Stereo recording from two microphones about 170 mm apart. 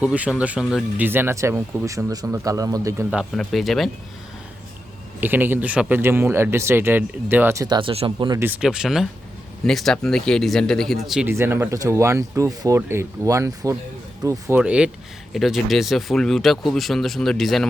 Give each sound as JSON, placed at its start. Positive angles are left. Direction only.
{"t": 0.0, "sound": "speech", "side_deg": -5}
{"t": 3.1, "sound": "speech", "side_deg": 0}
{"t": 5.2, "sound": "speech", "side_deg": -10}
{"t": 8.6, "sound": "speech", "side_deg": -5}
{"t": 11.3, "sound": "speech", "side_deg": -15}
{"t": 14.6, "sound": "speech", "side_deg": -5}